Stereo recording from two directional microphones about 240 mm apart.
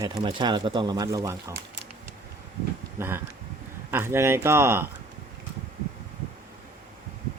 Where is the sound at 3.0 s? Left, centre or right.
Centre.